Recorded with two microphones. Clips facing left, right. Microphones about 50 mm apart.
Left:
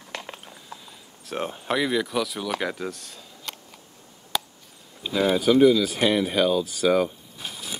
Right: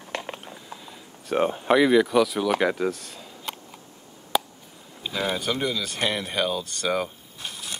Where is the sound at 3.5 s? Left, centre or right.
Centre.